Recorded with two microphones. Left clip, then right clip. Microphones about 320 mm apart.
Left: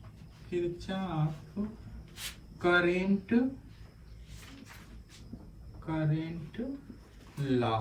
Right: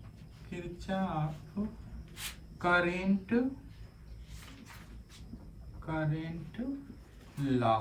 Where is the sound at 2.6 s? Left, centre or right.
Centre.